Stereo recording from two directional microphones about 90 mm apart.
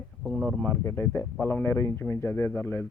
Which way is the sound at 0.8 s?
25° left (ahead or behind).